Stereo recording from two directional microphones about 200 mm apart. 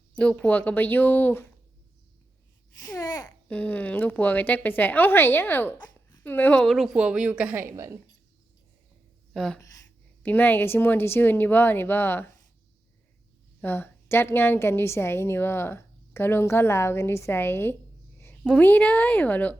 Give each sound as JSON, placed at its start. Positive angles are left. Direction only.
{"t": 0.2, "sound": "a woman's voice", "side_deg": 5}
{"t": 2.7, "sound": "a woman's voice", "side_deg": 20}
{"t": 3.5, "sound": "a woman's voice", "side_deg": 5}
{"t": 5.8, "sound": "babbling", "side_deg": 20}
{"t": 6.2, "sound": "a woman's voice", "side_deg": 10}
{"t": 9.3, "sound": "a woman's voice", "side_deg": 0}
{"t": 13.6, "sound": "a woman's voice", "side_deg": 10}